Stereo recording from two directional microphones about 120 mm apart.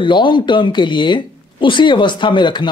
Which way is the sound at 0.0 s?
40° left (ahead or behind).